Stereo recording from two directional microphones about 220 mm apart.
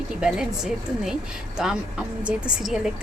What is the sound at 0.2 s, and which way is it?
Speech, 5° right (ahead or behind).